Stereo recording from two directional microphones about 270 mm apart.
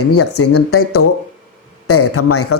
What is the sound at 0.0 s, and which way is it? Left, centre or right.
Speech, left.